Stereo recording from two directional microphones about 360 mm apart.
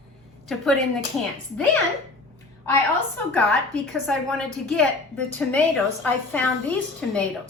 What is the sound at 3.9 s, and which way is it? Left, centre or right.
A woman's voice, centre.